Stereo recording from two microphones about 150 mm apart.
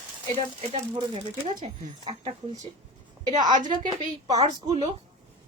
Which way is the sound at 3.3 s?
30° right (ahead or behind).